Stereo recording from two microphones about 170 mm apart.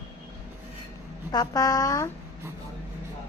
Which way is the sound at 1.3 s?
20° left (ahead or behind).